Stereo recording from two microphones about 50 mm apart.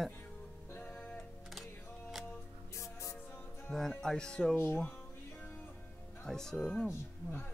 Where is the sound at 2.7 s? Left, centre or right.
Left.